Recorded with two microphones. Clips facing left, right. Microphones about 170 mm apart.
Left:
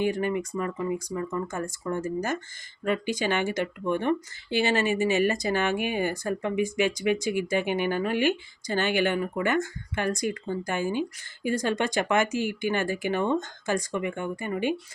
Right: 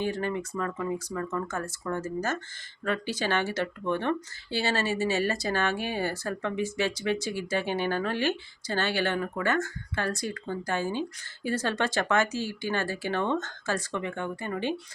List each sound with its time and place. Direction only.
0.0 s speech: 15° left (ahead or behind)